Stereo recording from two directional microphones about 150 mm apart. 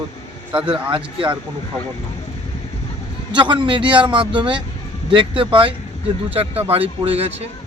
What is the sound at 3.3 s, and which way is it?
A man's voice, 30° right (ahead or behind).